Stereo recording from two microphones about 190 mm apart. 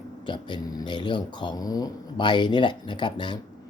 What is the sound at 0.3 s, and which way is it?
Speech, 25° left (ahead or behind).